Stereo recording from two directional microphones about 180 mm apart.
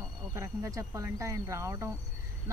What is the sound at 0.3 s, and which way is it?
Speech, 15° right (ahead or behind).